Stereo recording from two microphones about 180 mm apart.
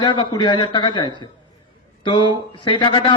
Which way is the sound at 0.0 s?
25° left (ahead or behind).